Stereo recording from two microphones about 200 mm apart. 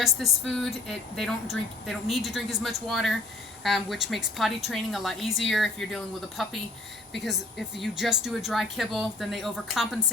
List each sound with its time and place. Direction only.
0.0 s a woman's voice: centre (ahead or behind)
7.8 s a woman's voice: centre (ahead or behind)